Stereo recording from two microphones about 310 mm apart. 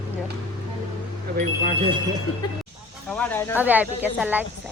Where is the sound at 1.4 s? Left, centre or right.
Centre.